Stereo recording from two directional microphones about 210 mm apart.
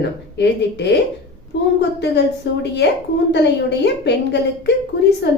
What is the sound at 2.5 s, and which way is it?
A woman's voice, 55° left (ahead or behind).